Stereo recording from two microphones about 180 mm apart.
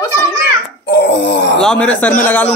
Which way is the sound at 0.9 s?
75° left (ahead or behind).